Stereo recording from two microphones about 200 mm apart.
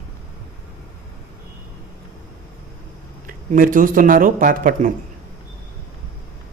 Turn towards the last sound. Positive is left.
turn(degrees=-40)  # may be behind; listen again after turning